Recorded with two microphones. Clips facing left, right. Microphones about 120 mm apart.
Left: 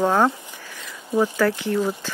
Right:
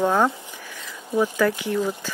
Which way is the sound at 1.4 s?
15° right (ahead or behind).